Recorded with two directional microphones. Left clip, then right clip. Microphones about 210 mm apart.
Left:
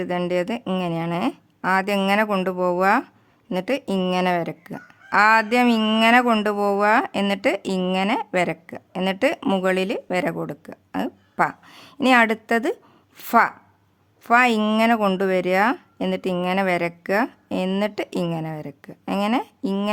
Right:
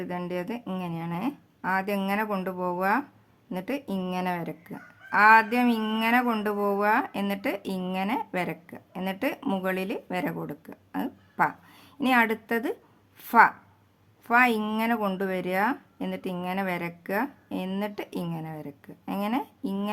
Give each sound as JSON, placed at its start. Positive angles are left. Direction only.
{"t": 0.0, "sound": "speech", "side_deg": 40}